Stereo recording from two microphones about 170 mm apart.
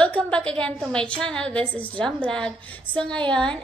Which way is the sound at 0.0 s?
5° left (ahead or behind).